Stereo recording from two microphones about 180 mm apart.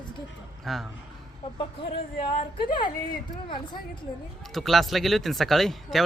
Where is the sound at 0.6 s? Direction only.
Centre (ahead or behind).